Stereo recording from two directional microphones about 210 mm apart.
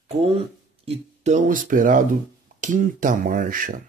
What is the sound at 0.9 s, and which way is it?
Speech, 35° right (ahead or behind).